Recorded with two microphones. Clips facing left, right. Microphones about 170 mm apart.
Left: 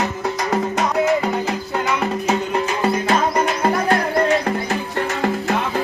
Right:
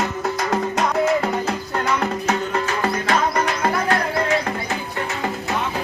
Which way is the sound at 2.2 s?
20° left (ahead or behind).